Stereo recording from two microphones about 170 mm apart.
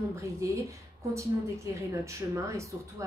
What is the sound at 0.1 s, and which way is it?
A woman's voice, 15° right (ahead or behind).